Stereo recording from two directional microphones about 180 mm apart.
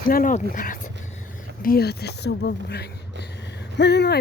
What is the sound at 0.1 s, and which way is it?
Speech, 50° left (ahead or behind).